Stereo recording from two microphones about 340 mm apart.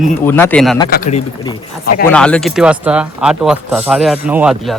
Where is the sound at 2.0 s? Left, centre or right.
Centre.